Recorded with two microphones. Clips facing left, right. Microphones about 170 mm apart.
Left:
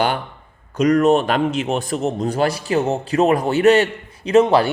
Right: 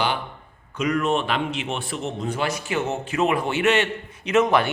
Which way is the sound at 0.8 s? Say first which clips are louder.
Left 8 dB; 40° left (ahead or behind).